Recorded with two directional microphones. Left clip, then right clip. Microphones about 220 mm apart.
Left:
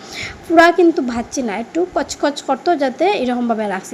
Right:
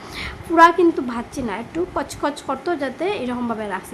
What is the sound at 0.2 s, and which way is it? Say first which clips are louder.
A woman's voice: left 2 dB; 15° left (ahead or behind).